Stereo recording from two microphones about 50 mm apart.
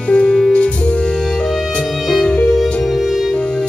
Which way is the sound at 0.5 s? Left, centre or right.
Left.